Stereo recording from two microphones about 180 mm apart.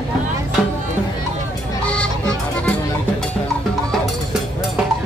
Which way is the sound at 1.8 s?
5° left (ahead or behind).